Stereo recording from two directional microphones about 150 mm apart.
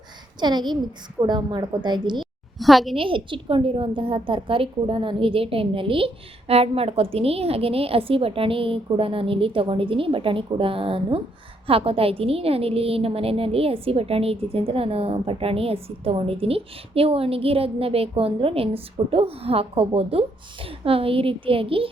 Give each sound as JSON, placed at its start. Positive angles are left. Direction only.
{"t": 0.3, "sound": "a woman's voice", "side_deg": -30}
{"t": 2.6, "sound": "a child's voice", "side_deg": 0}
{"t": 2.9, "sound": "a woman's voice", "side_deg": -35}